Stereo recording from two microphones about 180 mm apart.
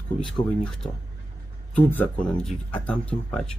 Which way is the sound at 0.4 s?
25° left (ahead or behind).